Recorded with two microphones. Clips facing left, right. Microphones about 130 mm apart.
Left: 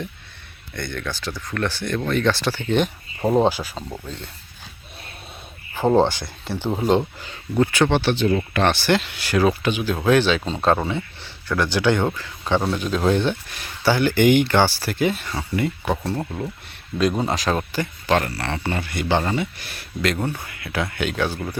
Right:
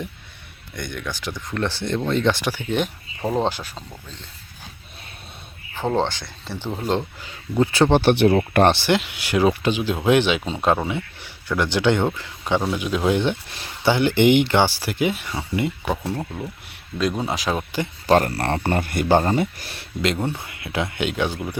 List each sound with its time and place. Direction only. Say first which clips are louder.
0.8 s speech: left 1 dB; 15° right (ahead or behind); by 3.7 s 5° left (ahead or behind)
5.7 s speech: left 5 dB; 10° left (ahead or behind)
7.7 s speech: right 7 dB; 35° right (ahead or behind)
8.1 s speech: right 4 dB; 70° right (ahead or behind)
8.6 s speech: right 2 dB; 25° right (ahead or behind)
13.2 s speech: even; 25° right (ahead or behind)
16.1 s speech: left 2 dB; 5° left (ahead or behind)
18.0 s speech: right 4 dB; 35° right (ahead or behind)
18.3 s a man's voice: right 4 dB; 50° right (ahead or behind); by 21.3 s 20° right (ahead or behind)